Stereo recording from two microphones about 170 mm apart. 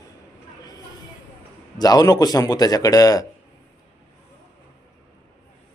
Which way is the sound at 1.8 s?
20° left (ahead or behind).